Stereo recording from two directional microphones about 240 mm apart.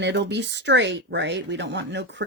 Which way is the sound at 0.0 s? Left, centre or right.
Right.